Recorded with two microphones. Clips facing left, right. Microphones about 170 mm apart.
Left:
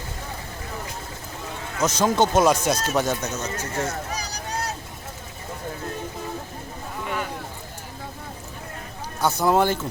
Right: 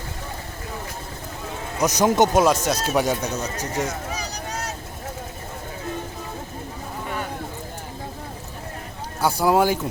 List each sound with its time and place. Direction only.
1.8 s speech: 15° right (ahead or behind)
2.4 s speech: centre (ahead or behind)
4.1 s vehicle: 35° left (ahead or behind)
9.2 s speech: 10° right (ahead or behind)